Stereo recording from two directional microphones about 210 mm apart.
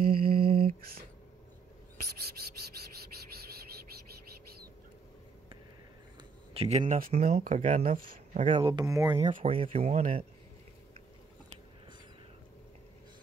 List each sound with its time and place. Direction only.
0.3 s lullaby: 45° right (ahead or behind)
6.5 s speech: 30° right (ahead or behind)
9.2 s speech: 30° right (ahead or behind)